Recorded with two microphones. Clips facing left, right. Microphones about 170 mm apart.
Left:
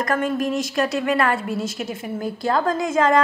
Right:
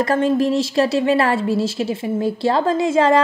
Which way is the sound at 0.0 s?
30° right (ahead or behind).